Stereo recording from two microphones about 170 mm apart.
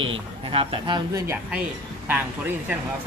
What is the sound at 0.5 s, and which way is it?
Speech, 30° right (ahead or behind).